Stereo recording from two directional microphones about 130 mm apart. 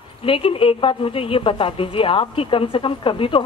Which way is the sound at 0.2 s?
45° left (ahead or behind).